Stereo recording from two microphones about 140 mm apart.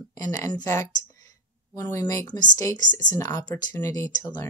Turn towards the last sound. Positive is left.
turn(degrees=30)  # may be behind; listen again after turning